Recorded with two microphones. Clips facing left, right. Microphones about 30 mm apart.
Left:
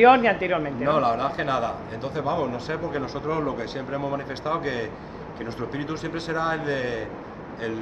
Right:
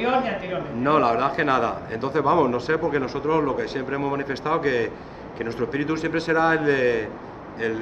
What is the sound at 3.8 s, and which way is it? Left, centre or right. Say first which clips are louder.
A man's voice: right 3 dB; right.